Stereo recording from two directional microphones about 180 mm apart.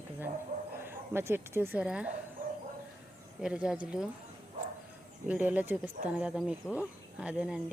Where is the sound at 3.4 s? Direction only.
5° right (ahead or behind).